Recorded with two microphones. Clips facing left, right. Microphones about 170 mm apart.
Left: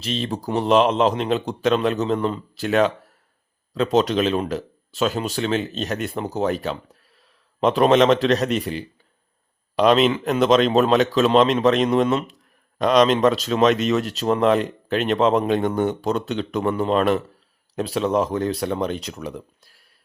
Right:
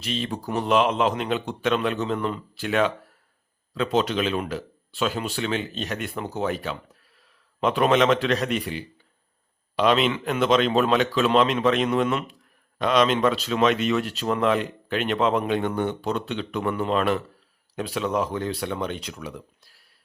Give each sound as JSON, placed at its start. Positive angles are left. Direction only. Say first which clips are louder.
{"t": 0.0, "sound": "speech", "louder": "left 3 dB", "side_deg": 35}
{"t": 3.9, "sound": "speech", "louder": "left 4 dB", "side_deg": 40}